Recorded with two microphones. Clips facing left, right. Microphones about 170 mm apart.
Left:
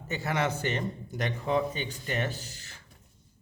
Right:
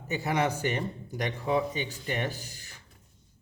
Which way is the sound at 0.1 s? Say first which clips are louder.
Right 2 dB; 10° right (ahead or behind).